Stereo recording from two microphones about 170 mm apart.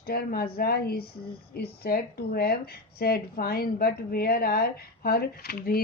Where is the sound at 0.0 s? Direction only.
65° left (ahead or behind).